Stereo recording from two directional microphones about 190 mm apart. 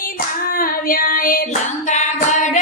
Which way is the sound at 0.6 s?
45° left (ahead or behind).